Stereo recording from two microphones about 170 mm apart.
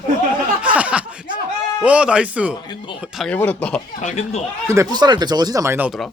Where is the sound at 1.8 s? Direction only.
5° right (ahead or behind).